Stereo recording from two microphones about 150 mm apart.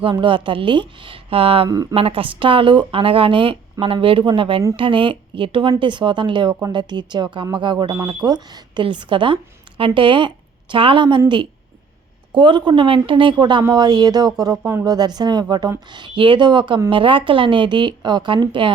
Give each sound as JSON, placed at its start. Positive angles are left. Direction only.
{"t": 0.0, "sound": "a woman's voice", "side_deg": -35}
{"t": 1.7, "sound": "speech", "side_deg": -25}
{"t": 2.0, "sound": "a woman's voice", "side_deg": -40}
{"t": 12.3, "sound": "a woman's voice", "side_deg": -30}